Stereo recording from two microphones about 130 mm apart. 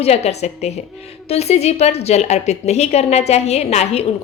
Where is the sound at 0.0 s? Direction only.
55° left (ahead or behind).